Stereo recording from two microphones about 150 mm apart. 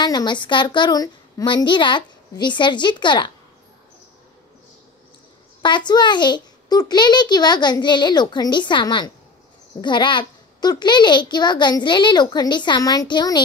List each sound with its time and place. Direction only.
0.0 s a woman's voice: 30° left (ahead or behind)
5.6 s a woman's voice: 30° left (ahead or behind)